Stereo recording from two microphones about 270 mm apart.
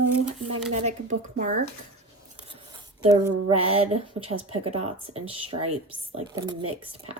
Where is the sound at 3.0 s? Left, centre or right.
Centre.